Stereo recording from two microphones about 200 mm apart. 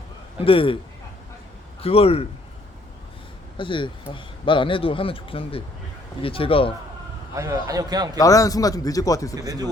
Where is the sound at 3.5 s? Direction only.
25° left (ahead or behind).